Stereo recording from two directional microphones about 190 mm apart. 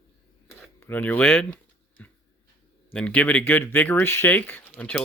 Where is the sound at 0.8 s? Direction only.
10° left (ahead or behind).